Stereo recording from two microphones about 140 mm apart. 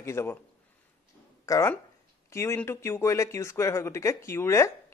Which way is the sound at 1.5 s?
25° left (ahead or behind).